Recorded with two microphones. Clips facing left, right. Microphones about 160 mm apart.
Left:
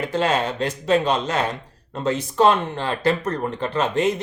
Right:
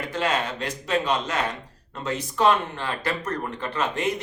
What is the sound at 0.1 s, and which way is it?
Speech, 30° left (ahead or behind).